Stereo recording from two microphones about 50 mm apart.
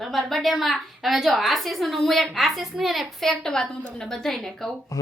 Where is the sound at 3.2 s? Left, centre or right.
Centre.